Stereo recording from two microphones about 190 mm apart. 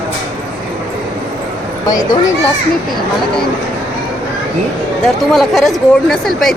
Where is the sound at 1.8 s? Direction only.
20° left (ahead or behind).